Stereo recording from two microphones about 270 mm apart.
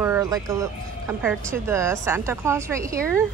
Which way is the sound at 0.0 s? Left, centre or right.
Centre.